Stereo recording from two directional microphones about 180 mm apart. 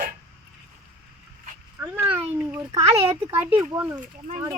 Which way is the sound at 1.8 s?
10° right (ahead or behind).